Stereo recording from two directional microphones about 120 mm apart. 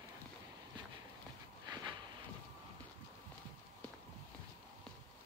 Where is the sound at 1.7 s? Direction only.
35° right (ahead or behind).